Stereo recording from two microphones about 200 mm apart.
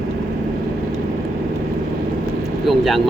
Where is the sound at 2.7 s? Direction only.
Centre (ahead or behind).